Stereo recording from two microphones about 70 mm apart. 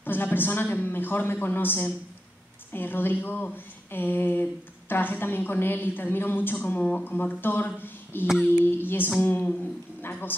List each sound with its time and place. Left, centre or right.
0.0 s a woman's voice: left